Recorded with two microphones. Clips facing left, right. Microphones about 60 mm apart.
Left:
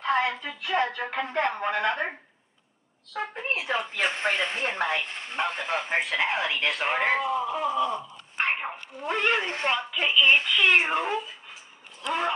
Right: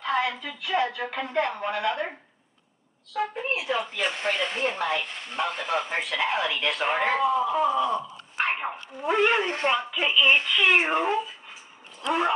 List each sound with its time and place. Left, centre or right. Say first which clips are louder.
0.0 s speech: left 1 dB; left
3.1 s speech: right 3 dB; left; by 7.6 s centre
8.5 s dog: even; centre
9.0 s a woman's voice: right 3 dB; centre